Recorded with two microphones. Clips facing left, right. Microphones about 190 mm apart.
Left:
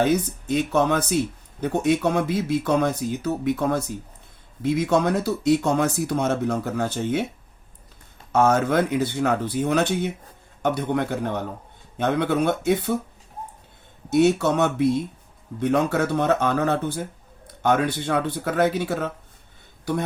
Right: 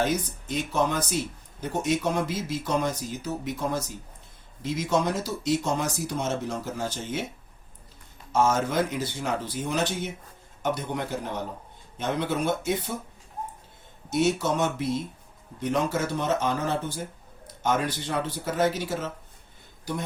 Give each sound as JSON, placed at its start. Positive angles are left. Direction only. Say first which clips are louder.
{"t": 0.0, "sound": "speech", "louder": "left 6 dB", "side_deg": 60}
{"t": 8.3, "sound": "speech", "louder": "left 5 dB", "side_deg": 60}
{"t": 14.1, "sound": "speech", "louder": "left 6 dB", "side_deg": 60}